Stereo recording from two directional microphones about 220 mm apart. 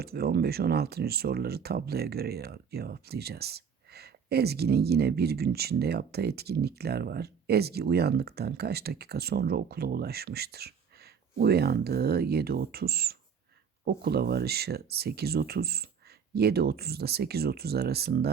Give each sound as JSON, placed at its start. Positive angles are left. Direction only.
{"t": 0.0, "sound": "speech", "side_deg": -45}